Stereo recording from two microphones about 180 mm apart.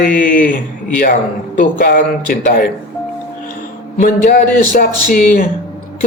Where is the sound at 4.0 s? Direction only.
50° left (ahead or behind).